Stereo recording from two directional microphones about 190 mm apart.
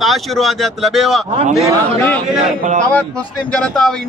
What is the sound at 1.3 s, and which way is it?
Speech, 35° right (ahead or behind).